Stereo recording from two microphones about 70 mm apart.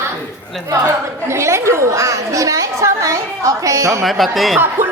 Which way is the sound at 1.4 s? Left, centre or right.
Right.